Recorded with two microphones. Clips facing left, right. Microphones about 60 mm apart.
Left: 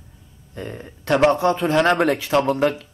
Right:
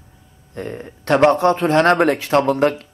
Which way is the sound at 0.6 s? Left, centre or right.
Right.